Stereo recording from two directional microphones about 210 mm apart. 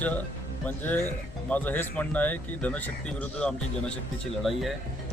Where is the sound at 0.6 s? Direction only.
10° left (ahead or behind).